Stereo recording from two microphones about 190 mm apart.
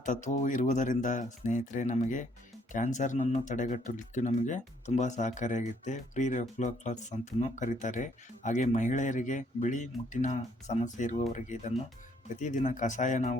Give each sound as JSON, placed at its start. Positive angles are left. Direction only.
{"t": 0.0, "sound": "speech", "side_deg": 40}